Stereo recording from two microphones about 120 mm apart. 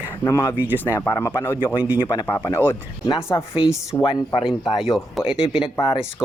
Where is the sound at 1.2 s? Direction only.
20° left (ahead or behind).